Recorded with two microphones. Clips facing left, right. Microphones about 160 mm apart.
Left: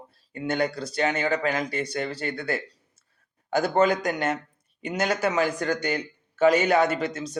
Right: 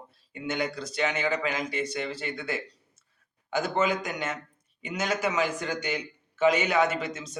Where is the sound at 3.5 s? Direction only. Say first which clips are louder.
Left 5 dB; 35° left (ahead or behind).